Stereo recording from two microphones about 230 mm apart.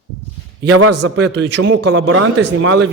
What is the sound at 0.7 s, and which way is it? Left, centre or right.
Speech, right.